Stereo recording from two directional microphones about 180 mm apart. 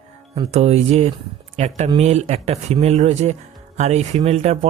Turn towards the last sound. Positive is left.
turn(degrees=-35)  # may be behind; listen again after turning